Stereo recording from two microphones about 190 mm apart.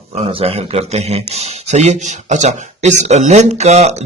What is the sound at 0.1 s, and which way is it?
Speech, 30° right (ahead or behind).